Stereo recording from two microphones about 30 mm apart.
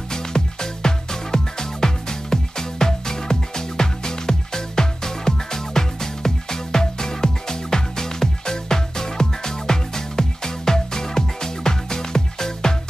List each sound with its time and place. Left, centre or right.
0.1 s music: left